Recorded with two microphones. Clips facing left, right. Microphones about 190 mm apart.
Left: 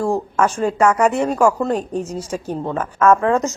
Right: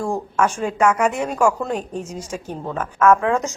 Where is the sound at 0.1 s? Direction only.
10° left (ahead or behind).